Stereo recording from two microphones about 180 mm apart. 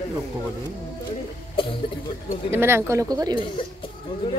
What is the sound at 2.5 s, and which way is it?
Speech, 15° right (ahead or behind).